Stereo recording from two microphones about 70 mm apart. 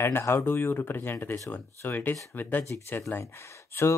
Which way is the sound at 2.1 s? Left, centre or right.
Left.